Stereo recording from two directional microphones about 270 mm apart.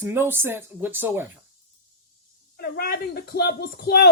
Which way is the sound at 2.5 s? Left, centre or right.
Left.